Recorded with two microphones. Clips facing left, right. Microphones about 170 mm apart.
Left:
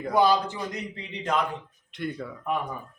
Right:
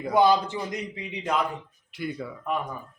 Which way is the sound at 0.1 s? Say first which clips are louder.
Right 2 dB; 20° right (ahead or behind).